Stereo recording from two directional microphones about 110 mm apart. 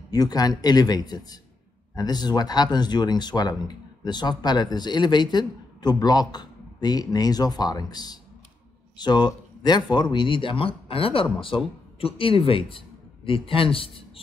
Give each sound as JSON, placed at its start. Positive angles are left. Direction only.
{"t": 0.1, "sound": "a man's voice", "side_deg": 35}